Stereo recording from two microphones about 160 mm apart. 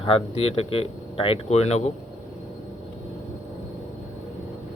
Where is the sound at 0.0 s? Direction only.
35° left (ahead or behind).